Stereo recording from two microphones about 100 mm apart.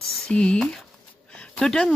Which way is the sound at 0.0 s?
5° left (ahead or behind).